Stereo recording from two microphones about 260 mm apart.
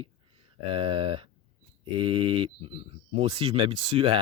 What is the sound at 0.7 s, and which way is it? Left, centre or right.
Speech, centre.